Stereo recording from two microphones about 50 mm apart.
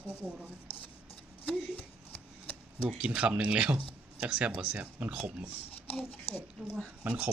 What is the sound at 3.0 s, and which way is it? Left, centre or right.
Speech, right.